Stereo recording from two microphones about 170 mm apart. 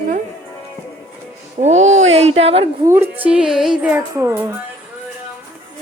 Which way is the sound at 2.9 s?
15° right (ahead or behind).